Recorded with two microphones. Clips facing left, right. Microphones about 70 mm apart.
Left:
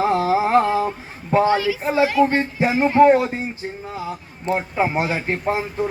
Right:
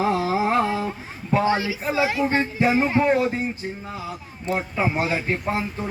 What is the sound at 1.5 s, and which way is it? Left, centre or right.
Speech, right.